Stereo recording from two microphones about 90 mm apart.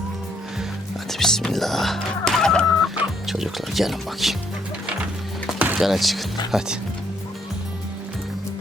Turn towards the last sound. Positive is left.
turn(degrees=-5)  # may be behind; listen again after turning